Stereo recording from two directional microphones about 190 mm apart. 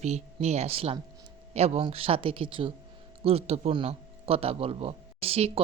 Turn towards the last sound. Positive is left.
turn(degrees=-30)  # may be behind; listen again after turning